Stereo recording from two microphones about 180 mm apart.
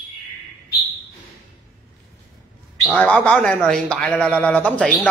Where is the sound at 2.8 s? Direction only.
5° left (ahead or behind).